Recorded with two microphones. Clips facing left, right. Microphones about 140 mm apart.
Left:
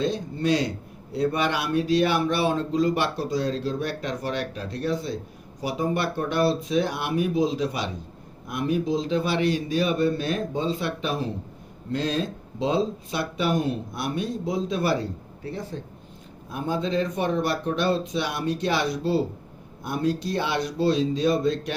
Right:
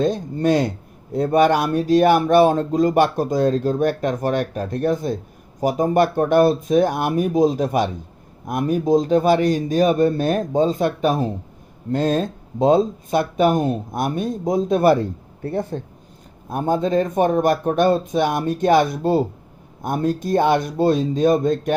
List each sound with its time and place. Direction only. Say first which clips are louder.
0.0 s speech: right 6 dB; 45° right (ahead or behind)